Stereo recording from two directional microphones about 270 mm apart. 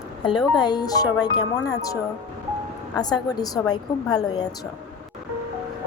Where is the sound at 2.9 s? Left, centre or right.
Centre.